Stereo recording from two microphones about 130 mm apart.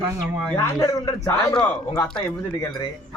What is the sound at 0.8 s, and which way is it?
A man's voice, 30° left (ahead or behind).